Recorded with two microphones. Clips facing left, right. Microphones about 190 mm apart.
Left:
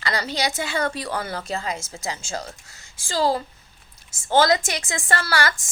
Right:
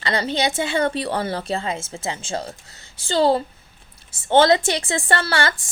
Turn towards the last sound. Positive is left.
turn(degrees=-25)  # may be behind; listen again after turning